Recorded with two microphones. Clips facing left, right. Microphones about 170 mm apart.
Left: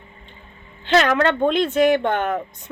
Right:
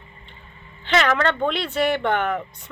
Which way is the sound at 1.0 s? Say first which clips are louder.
Left 3 dB; 15° left (ahead or behind).